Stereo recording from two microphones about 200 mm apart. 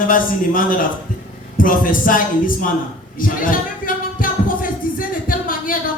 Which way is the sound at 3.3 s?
45° left (ahead or behind).